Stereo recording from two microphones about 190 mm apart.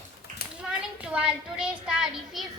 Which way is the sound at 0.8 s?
5° right (ahead or behind).